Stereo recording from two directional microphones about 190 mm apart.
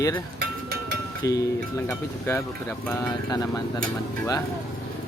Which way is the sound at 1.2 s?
20° left (ahead or behind).